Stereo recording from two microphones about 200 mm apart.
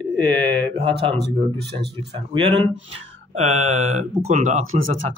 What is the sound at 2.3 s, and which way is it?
Speech, 25° right (ahead or behind).